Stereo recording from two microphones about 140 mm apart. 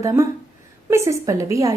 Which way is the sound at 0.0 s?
20° right (ahead or behind).